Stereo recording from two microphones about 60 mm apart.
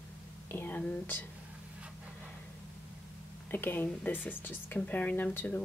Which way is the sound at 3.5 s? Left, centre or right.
Left.